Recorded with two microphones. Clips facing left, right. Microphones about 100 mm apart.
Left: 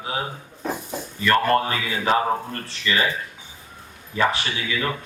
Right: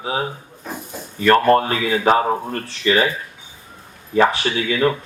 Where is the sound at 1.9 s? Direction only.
45° right (ahead or behind).